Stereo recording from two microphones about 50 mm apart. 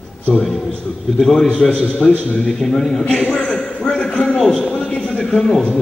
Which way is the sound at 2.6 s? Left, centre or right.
Centre.